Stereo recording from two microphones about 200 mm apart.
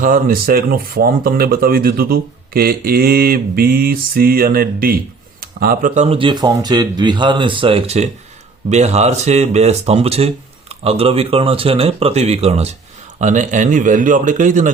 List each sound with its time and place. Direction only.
0.0 s speech: 45° right (ahead or behind)